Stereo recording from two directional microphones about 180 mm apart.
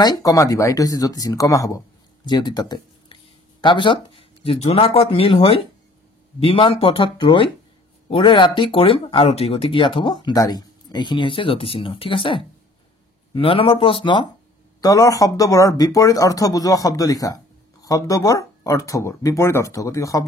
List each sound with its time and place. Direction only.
0.0 s speech: 20° left (ahead or behind)